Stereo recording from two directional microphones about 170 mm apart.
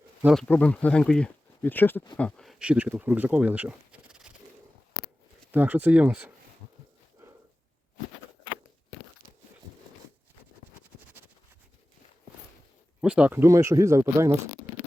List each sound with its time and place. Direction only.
0.3 s speech: 5° left (ahead or behind)
5.5 s speech: 10° right (ahead or behind)
11.2 s a sound: 10° right (ahead or behind)
13.0 s speech: 5° right (ahead or behind)